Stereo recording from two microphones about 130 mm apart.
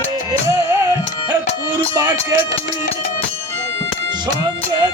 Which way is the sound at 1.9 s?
25° right (ahead or behind).